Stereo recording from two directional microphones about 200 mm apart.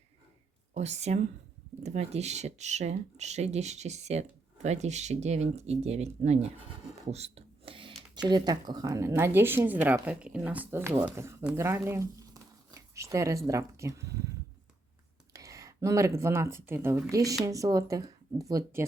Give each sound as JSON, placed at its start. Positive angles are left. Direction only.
{"t": 0.7, "sound": "speech", "side_deg": -35}
{"t": 15.3, "sound": "speech", "side_deg": -15}